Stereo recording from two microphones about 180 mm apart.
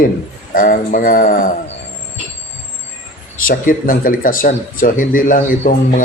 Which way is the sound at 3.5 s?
50° left (ahead or behind).